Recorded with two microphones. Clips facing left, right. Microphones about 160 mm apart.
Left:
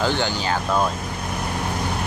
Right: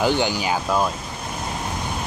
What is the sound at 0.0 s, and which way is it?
Speech, 15° right (ahead or behind).